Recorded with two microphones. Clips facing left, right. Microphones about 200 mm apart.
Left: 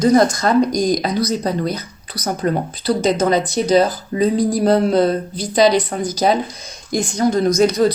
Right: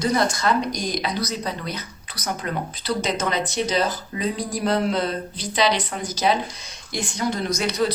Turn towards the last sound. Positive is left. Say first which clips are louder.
# left 9 dB
turn(degrees=45)  # may be behind; listen again after turning